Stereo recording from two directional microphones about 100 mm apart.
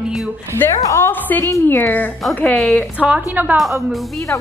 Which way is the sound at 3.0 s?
10° right (ahead or behind).